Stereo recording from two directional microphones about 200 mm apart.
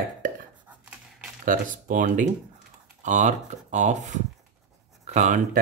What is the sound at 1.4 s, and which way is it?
Speech, 40° right (ahead or behind).